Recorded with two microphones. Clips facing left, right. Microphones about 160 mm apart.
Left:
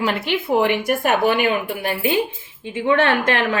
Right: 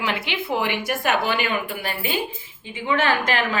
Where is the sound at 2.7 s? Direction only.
65° left (ahead or behind).